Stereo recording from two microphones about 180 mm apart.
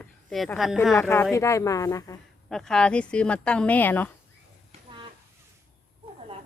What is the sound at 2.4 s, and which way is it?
Speech, centre (ahead or behind).